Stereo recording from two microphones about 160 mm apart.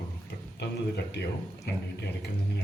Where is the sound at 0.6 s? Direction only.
90° left.